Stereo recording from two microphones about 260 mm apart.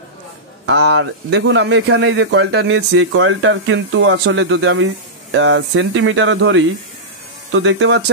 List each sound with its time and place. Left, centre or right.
0.7 s speech: right